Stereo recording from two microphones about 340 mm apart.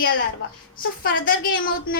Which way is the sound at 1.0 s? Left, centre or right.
Left.